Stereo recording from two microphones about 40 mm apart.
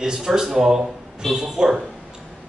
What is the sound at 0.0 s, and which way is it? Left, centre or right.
Speech, centre.